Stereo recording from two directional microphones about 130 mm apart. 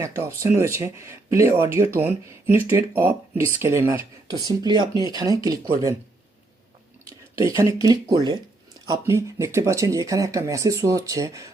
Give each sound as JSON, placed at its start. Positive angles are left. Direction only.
{"t": 0.0, "sound": "speech", "side_deg": -20}
{"t": 4.3, "sound": "speech", "side_deg": -35}
{"t": 7.1, "sound": "speech", "side_deg": -25}